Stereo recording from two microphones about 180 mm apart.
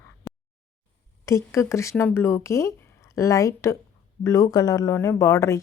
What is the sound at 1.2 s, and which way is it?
Speech, 15° left (ahead or behind).